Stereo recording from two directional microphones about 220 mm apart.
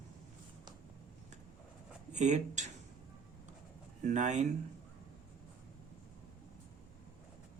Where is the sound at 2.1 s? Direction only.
35° right (ahead or behind).